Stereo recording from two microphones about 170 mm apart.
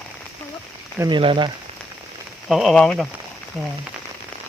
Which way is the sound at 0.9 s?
25° right (ahead or behind).